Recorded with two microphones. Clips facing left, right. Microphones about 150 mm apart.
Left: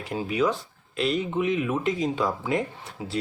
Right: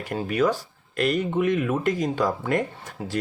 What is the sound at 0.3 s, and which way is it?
Speech, 50° right (ahead or behind).